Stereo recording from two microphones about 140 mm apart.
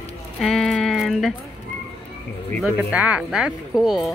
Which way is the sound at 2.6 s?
5° right (ahead or behind).